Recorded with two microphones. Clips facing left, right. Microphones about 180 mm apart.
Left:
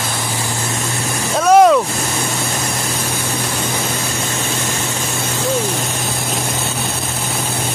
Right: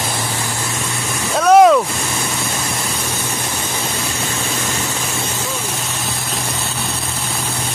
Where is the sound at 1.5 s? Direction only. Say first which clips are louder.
Even; centre (ahead or behind).